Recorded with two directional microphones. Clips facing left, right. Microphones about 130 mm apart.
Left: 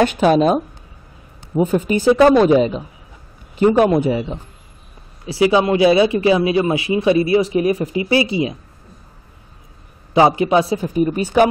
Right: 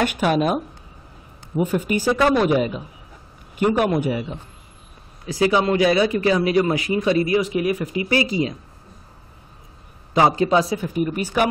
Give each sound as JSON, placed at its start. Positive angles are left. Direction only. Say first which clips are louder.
{"t": 0.0, "sound": "a man's voice", "louder": "left 6 dB", "side_deg": 30}
{"t": 7.3, "sound": "a man's voice", "louder": "left 5 dB", "side_deg": 30}
{"t": 10.1, "sound": "a man's voice", "louder": "left 3 dB", "side_deg": 20}